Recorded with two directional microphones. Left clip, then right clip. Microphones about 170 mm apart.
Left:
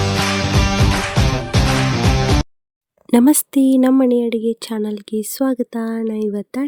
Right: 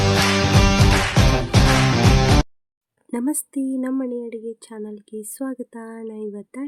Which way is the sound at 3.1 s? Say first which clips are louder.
Left 12 dB; 55° left (ahead or behind).